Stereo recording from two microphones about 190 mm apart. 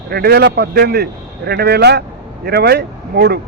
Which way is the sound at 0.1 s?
55° right (ahead or behind).